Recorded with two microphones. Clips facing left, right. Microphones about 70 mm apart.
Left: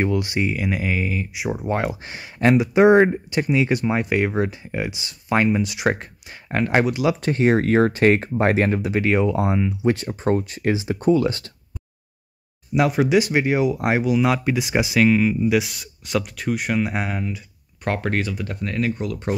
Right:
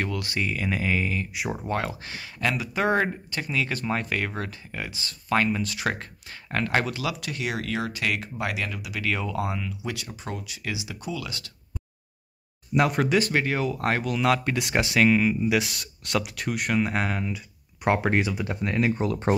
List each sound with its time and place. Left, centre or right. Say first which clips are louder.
0.0 s speech: left 7 dB; left; by 1.7 s centre
1.7 s speech: left 6 dB; centre
7.2 s speech: left 12 dB; left
12.7 s speech: left 4 dB; centre
17.8 s speech: right 1 dB; centre; by 19.3 s right